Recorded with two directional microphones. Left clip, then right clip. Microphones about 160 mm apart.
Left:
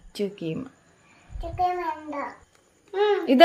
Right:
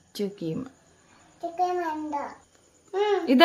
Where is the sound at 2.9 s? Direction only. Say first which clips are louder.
Left 3 dB; 25° right (ahead or behind).